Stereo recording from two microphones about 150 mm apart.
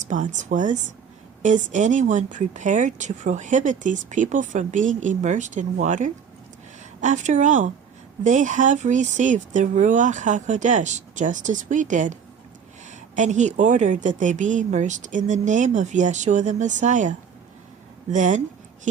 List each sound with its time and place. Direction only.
0.1 s a woman's voice: 55° right (ahead or behind)